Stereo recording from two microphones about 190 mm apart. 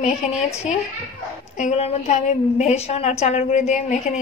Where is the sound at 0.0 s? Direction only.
35° left (ahead or behind).